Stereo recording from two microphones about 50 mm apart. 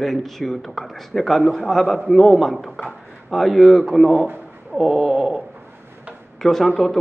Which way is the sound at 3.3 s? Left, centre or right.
Centre.